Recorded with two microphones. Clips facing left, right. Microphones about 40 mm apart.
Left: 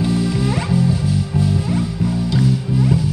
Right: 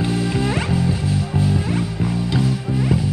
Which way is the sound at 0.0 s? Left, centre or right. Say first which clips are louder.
Left 2 dB; right.